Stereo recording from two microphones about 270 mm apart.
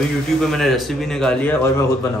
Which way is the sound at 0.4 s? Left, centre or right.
Centre.